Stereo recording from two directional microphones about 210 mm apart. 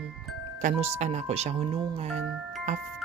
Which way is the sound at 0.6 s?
35° right (ahead or behind).